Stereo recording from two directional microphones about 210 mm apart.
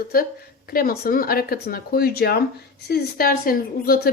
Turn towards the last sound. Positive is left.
turn(degrees=45)  # may be behind; listen again after turning